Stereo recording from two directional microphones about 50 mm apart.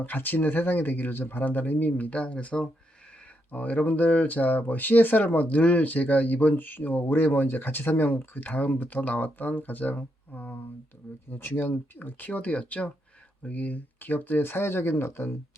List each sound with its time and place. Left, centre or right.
0.0 s speech: left
8.4 s speech: left
11.3 s speech: left